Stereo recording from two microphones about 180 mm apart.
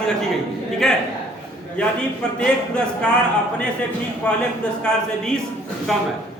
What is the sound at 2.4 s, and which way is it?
Speech, 5° left (ahead or behind).